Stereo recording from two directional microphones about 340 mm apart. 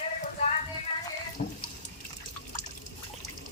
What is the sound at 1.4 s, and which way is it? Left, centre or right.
Water, left.